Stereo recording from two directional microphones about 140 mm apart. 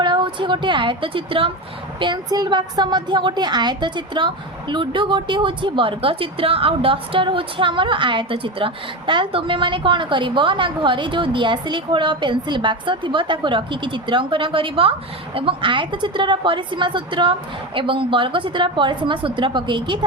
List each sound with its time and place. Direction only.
0.0 s a woman's voice: 35° right (ahead or behind)